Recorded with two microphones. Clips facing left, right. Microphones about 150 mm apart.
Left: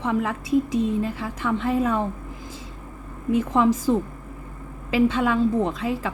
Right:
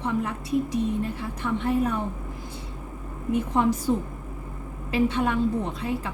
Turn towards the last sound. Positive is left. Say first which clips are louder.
# left 4 dB
turn(degrees=90)